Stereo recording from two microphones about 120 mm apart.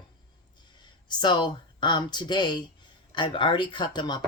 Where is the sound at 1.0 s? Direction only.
40° left (ahead or behind).